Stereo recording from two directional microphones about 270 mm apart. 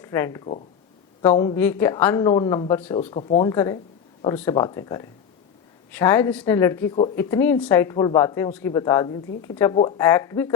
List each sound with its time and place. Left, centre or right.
0.0 s speech: centre